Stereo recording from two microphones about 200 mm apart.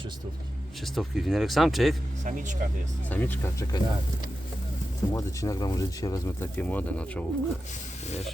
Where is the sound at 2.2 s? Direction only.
40° right (ahead or behind).